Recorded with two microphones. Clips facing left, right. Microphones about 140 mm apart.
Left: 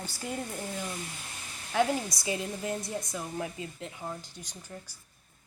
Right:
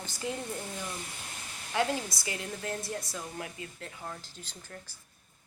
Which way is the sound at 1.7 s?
20° left (ahead or behind).